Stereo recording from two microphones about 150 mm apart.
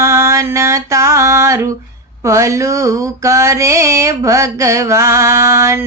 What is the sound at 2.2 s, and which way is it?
Female singing, 20° right (ahead or behind).